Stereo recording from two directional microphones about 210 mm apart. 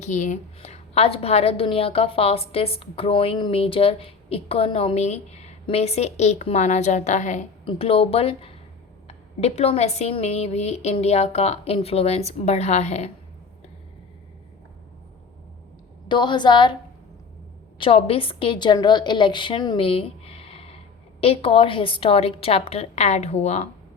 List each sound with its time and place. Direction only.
0.0 s a woman's voice: 35° left (ahead or behind)
16.0 s a woman's voice: 20° left (ahead or behind)
17.7 s a woman's voice: 25° left (ahead or behind)